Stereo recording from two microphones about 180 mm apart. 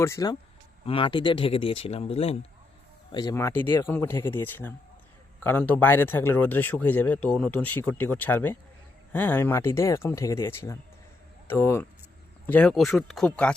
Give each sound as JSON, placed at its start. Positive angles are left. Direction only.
{"t": 0.0, "sound": "speech", "side_deg": 20}
{"t": 0.9, "sound": "speech", "side_deg": 30}
{"t": 3.1, "sound": "speech", "side_deg": 20}